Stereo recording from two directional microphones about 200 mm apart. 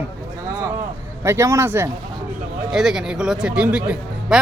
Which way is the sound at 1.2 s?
15° right (ahead or behind).